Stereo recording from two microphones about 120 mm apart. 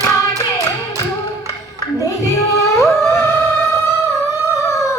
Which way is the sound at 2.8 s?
20° left (ahead or behind).